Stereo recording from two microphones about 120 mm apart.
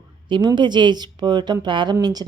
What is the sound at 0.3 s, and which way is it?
Speech, 40° right (ahead or behind).